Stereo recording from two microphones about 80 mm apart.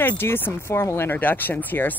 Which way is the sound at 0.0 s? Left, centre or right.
Left.